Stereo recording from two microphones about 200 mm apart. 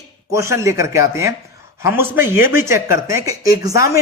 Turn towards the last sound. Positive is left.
turn(degrees=-15)  # may be behind; listen again after turning